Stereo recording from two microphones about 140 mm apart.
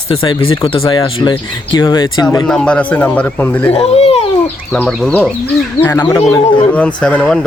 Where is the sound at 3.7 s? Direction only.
50° left (ahead or behind).